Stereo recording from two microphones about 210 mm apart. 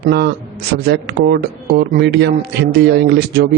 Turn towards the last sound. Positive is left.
turn(degrees=-50)  # may be behind; listen again after turning